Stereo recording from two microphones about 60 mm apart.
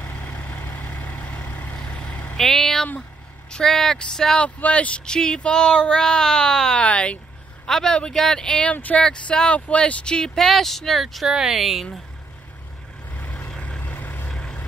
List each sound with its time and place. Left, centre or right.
0.1 s vehicle: left
2.3 s vehicle: centre
3.5 s speech: centre
4.6 s speech: left
8.7 s speech: left
9.0 s speech: centre
13.1 s vehicle: left
14.3 s vehicle: centre